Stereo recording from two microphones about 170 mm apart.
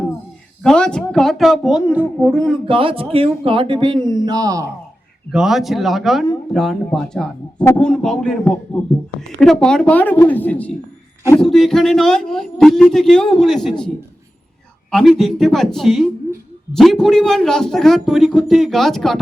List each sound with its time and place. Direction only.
0.6 s speech: 5° left (ahead or behind)
2.6 s speech: 30° right (ahead or behind)
5.3 s a woman's voice: 5° right (ahead or behind)